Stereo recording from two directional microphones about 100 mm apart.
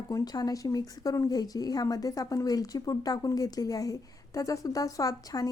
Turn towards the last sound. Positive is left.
turn(degrees=35)  # may be behind; listen again after turning